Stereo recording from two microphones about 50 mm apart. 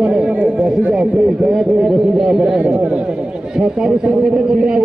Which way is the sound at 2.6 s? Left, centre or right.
Right.